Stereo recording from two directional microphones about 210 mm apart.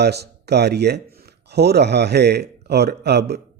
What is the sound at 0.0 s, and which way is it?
A man's voice, 50° right (ahead or behind).